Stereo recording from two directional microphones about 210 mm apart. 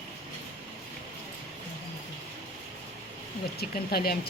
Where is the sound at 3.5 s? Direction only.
50° left (ahead or behind).